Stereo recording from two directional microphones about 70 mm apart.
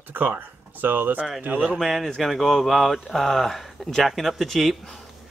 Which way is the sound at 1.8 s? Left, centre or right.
Centre.